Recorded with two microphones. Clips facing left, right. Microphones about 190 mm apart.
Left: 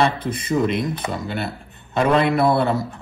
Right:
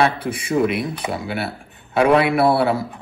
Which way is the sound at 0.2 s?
10° right (ahead or behind).